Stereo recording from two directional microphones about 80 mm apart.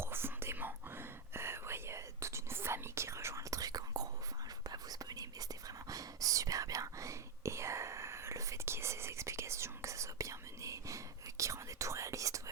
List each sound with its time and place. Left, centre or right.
0.0 s whispering: right